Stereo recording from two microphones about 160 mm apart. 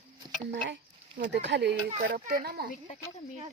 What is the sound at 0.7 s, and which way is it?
Speech, 90° right.